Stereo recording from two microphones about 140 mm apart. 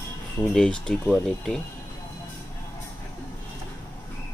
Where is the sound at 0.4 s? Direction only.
5° left (ahead or behind).